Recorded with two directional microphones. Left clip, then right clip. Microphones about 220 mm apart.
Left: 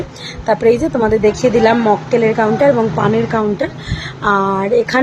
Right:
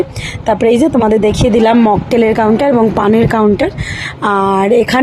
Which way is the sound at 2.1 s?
40° right (ahead or behind).